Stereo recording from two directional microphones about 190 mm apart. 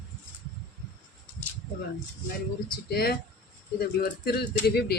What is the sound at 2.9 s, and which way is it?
Speech, 55° left (ahead or behind).